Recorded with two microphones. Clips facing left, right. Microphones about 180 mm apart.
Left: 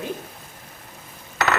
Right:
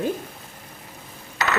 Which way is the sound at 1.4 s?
55° left (ahead or behind).